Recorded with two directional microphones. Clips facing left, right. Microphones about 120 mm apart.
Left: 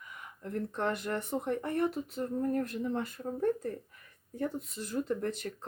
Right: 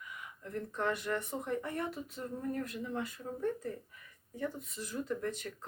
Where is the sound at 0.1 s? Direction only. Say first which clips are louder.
Left 4 dB; 45° left (ahead or behind).